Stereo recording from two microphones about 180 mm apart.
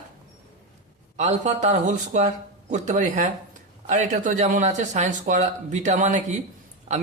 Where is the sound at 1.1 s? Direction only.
40° right (ahead or behind).